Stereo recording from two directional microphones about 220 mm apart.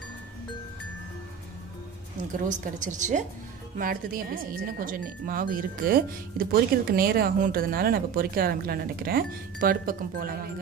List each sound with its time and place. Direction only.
2.3 s speech: 35° right (ahead or behind)